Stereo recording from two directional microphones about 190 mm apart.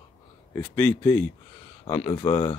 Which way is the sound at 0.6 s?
10° left (ahead or behind).